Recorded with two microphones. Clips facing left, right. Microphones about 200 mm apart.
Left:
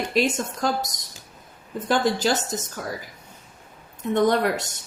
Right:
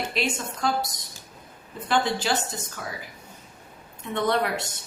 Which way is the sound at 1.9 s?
40° left (ahead or behind).